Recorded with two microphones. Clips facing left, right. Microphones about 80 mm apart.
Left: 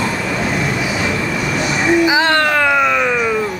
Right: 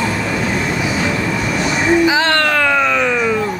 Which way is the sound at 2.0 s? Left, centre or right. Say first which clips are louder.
Even; centre.